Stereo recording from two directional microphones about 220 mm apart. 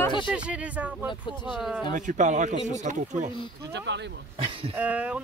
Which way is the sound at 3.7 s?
50° right (ahead or behind).